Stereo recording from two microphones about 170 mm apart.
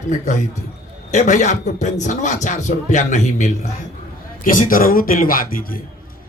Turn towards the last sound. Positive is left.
turn(degrees=55)  # may be behind; listen again after turning